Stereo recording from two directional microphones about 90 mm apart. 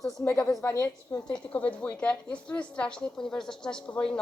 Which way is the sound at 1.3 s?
15° left (ahead or behind).